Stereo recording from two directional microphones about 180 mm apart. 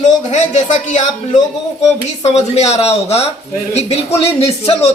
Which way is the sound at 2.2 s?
40° left (ahead or behind).